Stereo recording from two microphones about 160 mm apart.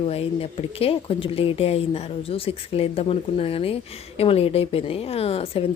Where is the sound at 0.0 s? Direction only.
40° left (ahead or behind).